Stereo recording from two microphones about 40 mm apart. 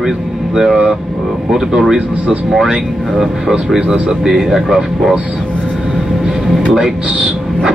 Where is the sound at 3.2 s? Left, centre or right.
Centre.